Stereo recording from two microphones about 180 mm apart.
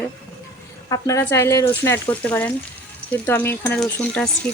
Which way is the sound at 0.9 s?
15° left (ahead or behind).